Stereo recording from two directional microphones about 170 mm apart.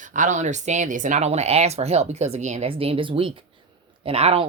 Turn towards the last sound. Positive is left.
turn(degrees=-35)  # may be behind; listen again after turning